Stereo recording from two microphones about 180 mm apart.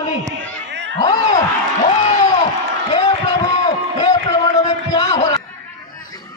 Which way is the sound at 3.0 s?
20° left (ahead or behind).